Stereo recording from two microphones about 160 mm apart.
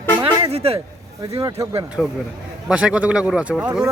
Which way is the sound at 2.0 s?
Centre (ahead or behind).